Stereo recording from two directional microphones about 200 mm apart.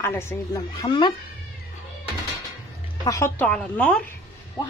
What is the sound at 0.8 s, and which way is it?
Speech, 25° left (ahead or behind).